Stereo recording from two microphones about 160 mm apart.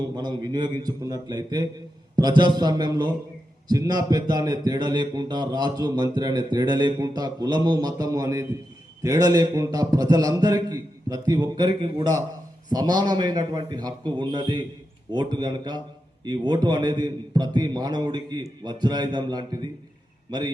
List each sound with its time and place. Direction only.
0.2 s a man's voice: 25° right (ahead or behind)